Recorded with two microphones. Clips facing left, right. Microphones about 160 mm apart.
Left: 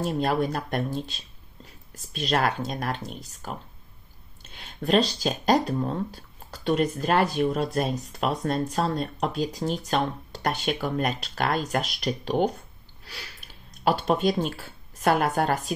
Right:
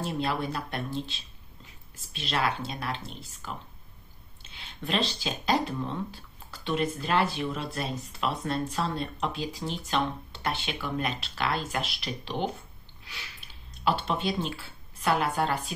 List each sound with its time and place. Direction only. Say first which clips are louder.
0.0 s speech: left 5 dB; 45° left (ahead or behind)